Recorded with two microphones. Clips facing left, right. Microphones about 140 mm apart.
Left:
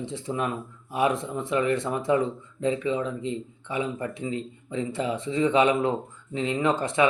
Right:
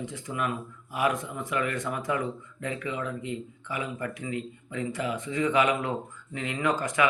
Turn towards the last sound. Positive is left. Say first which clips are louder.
# left 3 dB
turn(degrees=25)  # may be behind; listen again after turning